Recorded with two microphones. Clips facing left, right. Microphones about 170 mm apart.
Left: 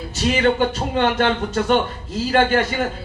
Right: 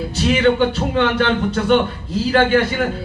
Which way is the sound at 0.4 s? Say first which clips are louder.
Right 3 dB; 45° left (ahead or behind).